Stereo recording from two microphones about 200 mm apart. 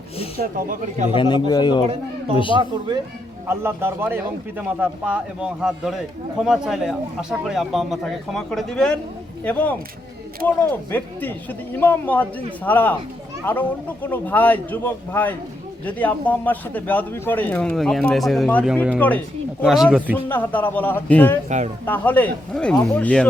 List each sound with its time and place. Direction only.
0.3 s a man's voice: 40° right (ahead or behind)
1.1 s speech: 25° left (ahead or behind)
1.9 s a man's voice: 30° right (ahead or behind)
3.4 s a man's voice: 10° right (ahead or behind); by 19.2 s 10° left (ahead or behind)
19.6 s a man's voice: centre (ahead or behind)
20.2 s a man's voice: 10° left (ahead or behind)